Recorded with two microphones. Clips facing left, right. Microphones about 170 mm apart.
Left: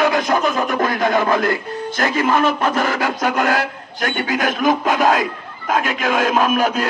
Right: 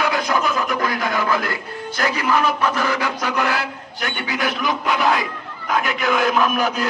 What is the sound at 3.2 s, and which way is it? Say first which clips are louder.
A man's voice: left 4 dB; 45° left (ahead or behind).